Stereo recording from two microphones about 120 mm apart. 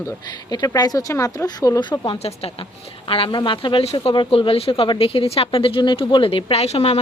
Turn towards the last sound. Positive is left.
turn(degrees=65)  # may be behind; listen again after turning